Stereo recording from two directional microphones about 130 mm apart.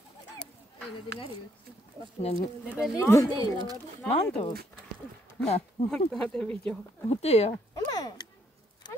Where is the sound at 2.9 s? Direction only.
25° left (ahead or behind).